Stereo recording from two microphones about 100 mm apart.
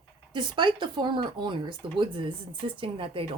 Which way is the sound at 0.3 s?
55° right (ahead or behind).